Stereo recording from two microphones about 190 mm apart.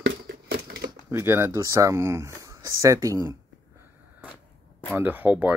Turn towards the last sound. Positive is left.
turn(degrees=-10)  # may be behind; listen again after turning